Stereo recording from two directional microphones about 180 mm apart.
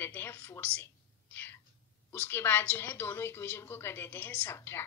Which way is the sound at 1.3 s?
10° left (ahead or behind).